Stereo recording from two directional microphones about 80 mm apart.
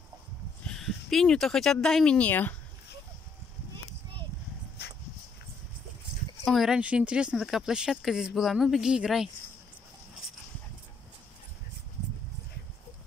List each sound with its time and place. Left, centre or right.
0.7 s speech: centre
2.1 s speech: left
6.4 s speech: centre
6.8 s speech: centre